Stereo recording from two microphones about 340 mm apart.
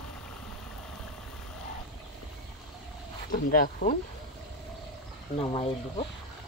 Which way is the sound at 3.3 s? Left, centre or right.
Left.